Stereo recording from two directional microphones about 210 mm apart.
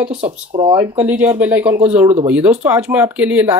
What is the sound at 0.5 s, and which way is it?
Speech, 25° right (ahead or behind).